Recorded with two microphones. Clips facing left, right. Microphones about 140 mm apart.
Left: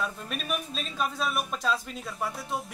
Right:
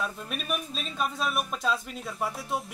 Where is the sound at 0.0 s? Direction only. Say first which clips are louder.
Even; centre (ahead or behind).